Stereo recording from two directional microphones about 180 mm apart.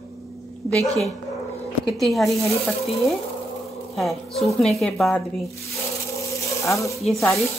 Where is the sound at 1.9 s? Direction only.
Centre (ahead or behind).